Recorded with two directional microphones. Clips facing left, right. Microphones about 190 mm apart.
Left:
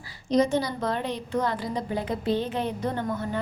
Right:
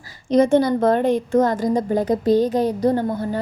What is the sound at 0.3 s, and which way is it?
A woman's voice, 55° right (ahead or behind).